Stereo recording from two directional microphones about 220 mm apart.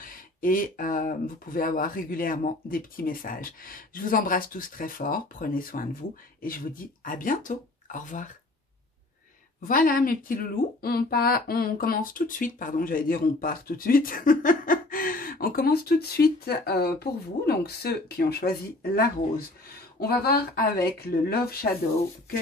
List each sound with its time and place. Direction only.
0.0 s speech: 40° left (ahead or behind)
9.6 s speech: 40° left (ahead or behind)